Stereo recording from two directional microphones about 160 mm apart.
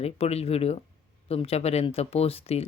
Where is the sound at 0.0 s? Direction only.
40° left (ahead or behind).